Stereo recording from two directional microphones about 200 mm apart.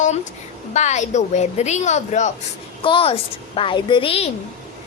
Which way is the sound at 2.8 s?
25° left (ahead or behind).